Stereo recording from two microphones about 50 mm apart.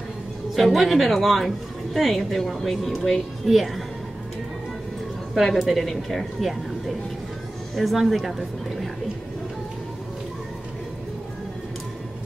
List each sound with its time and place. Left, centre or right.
0.6 s a woman's voice: centre
5.3 s a woman's voice: centre